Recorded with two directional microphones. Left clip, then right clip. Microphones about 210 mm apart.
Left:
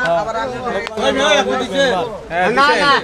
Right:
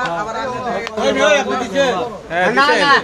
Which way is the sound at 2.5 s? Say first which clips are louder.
Left 1 dB; 15° right (ahead or behind).